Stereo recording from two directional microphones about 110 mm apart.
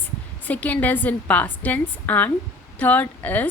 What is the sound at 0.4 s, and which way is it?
A woman's voice, 15° left (ahead or behind).